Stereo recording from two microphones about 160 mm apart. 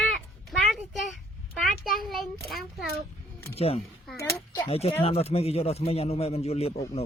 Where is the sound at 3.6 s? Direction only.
40° left (ahead or behind).